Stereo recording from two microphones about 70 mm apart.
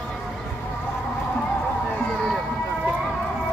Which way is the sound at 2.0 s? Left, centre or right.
Centre.